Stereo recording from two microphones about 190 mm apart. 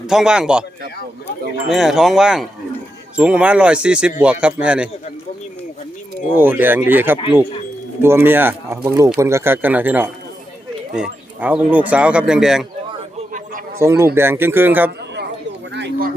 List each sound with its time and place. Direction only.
0.1 s speech: 5° right (ahead or behind)
1.6 s speech: centre (ahead or behind)
6.3 s speech: 10° right (ahead or behind)
13.7 s speech: 15° right (ahead or behind)
15.7 s a sound: 65° right (ahead or behind)